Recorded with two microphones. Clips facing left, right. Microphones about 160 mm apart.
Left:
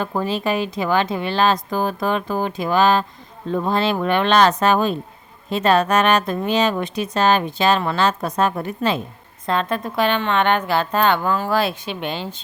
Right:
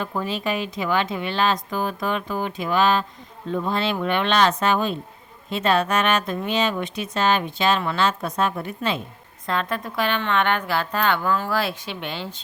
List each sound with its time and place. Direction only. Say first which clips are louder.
0.0 s speech: left 4 dB; 40° left (ahead or behind)
9.5 s a woman's voice: left 4 dB; 25° left (ahead or behind)